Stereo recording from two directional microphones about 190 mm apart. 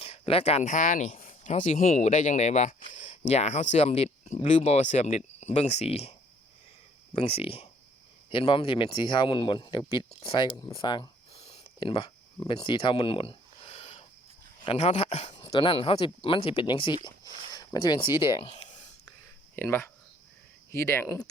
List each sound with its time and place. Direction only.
0.0 s speech: 30° left (ahead or behind)
7.2 s speech: 30° left (ahead or behind)
15.4 s speech: 25° left (ahead or behind)
19.5 s speech: 10° left (ahead or behind)